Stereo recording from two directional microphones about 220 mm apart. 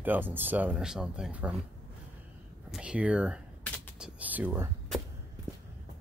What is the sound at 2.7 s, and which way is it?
Speech, 5° right (ahead or behind).